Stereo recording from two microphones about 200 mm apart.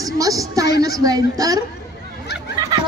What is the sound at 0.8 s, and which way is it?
Speech, 20° right (ahead or behind).